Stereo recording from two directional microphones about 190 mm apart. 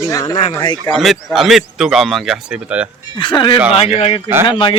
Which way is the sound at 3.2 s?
25° left (ahead or behind).